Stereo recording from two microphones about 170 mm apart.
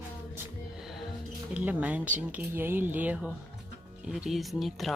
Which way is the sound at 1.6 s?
10° right (ahead or behind).